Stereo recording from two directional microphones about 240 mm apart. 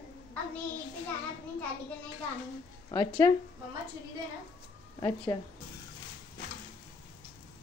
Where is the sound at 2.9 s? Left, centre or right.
Centre.